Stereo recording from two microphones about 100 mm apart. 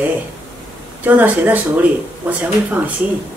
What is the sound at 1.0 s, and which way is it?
Speech, 15° right (ahead or behind).